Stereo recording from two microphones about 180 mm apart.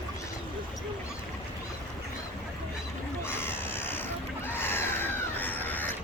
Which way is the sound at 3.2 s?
10° left (ahead or behind).